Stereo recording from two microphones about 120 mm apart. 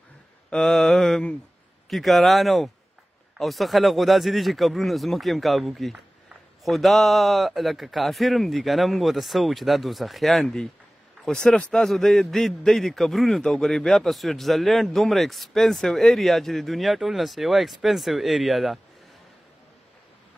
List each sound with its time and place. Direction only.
0.5 s mantra: 5° left (ahead or behind)
1.9 s a man's voice: centre (ahead or behind)